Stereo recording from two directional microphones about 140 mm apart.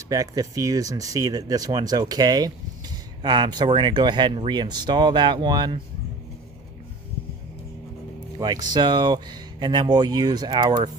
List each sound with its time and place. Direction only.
0.1 s speech: 25° right (ahead or behind)
8.4 s speech: 30° right (ahead or behind)